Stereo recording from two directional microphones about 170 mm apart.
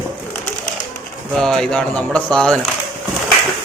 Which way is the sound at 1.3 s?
5° left (ahead or behind).